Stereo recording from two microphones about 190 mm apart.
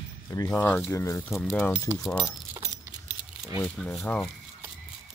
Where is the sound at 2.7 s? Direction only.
25° left (ahead or behind).